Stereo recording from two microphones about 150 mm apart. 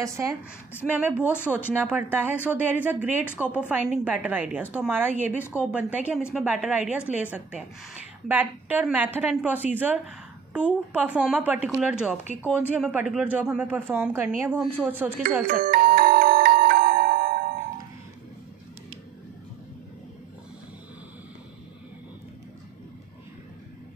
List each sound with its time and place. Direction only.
0.0 s a woman's voice: 20° right (ahead or behind)
0.9 s a woman's voice: 10° right (ahead or behind)
15.5 s music: 70° right (ahead or behind)